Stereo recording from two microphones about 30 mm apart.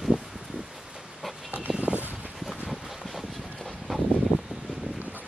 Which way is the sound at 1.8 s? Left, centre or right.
Right.